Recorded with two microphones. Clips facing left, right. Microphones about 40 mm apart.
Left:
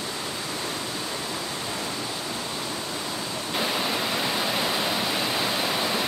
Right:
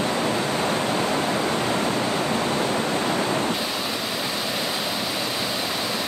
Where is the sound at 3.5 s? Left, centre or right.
Centre.